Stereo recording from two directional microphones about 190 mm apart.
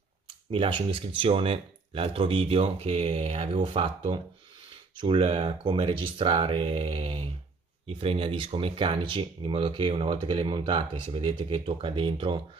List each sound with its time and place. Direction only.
0.5 s speech: 25° right (ahead or behind)